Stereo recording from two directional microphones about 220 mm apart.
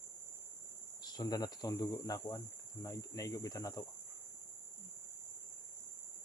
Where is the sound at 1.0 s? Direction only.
20° left (ahead or behind).